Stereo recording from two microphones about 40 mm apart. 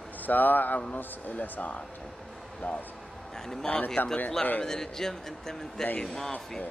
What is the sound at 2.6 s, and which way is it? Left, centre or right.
Speech, left.